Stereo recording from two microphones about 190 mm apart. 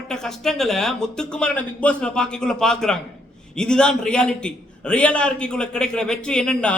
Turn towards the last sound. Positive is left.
turn(degrees=5)  # may be behind; listen again after turning